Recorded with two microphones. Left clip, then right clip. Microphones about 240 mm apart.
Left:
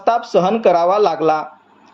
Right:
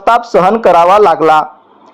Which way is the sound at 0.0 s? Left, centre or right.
Centre.